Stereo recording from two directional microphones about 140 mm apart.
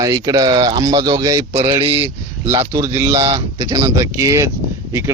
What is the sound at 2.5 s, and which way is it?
Speech, 25° right (ahead or behind).